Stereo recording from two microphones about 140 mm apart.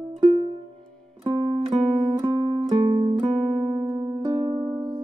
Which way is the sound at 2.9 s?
40° right (ahead or behind).